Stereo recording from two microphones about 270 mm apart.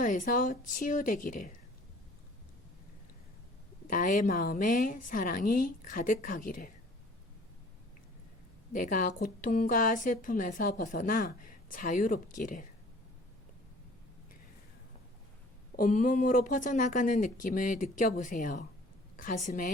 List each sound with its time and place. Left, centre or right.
0.0 s a woman's voice: left
3.8 s a woman's voice: left
8.7 s a woman's voice: left
15.7 s a woman's voice: left